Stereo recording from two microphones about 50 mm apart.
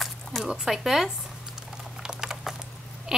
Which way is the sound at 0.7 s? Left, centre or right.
Centre.